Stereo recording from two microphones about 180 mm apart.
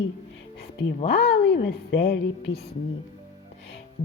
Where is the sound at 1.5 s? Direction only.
70° left (ahead or behind).